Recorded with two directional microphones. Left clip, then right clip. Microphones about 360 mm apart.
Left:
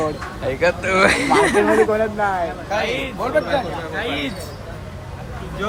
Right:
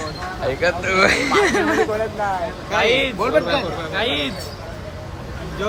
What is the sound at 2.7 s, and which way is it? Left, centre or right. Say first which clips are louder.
Speech: right 6 dB; right.